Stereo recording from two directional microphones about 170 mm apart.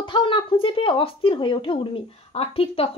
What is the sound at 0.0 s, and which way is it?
A woman's voice, 30° left (ahead or behind).